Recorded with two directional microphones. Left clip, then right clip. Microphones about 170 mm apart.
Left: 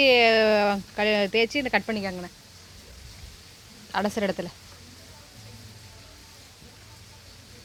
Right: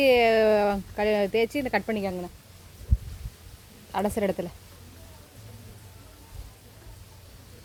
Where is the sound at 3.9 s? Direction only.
10° right (ahead or behind).